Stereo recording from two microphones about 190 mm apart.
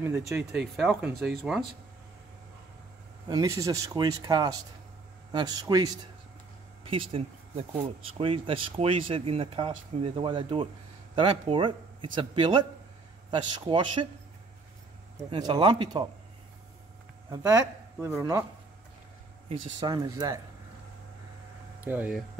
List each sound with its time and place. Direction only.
0.5 s speech: centre (ahead or behind)
3.3 s speech: 20° right (ahead or behind)
15.1 s speech: 20° right (ahead or behind)
17.3 s speech: 20° right (ahead or behind)
19.8 s speech: 20° right (ahead or behind)
21.8 s speech: 10° right (ahead or behind)